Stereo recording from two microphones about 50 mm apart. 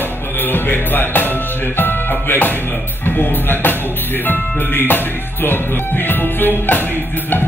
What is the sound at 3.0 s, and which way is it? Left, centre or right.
Speech, left.